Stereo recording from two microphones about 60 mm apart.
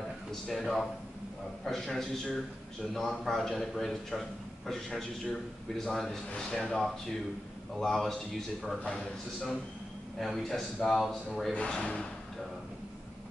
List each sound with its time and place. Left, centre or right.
0.3 s a man's voice: centre
11.5 s speech: centre